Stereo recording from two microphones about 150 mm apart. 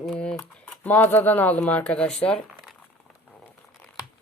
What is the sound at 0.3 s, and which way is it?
Speech, 10° left (ahead or behind).